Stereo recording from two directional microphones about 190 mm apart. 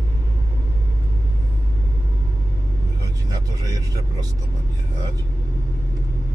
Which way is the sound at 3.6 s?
20° right (ahead or behind).